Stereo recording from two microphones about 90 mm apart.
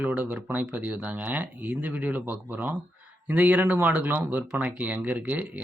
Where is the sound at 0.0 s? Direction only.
20° right (ahead or behind).